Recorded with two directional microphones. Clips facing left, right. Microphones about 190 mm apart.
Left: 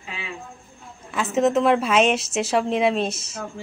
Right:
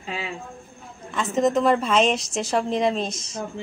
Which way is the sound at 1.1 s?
5° left (ahead or behind).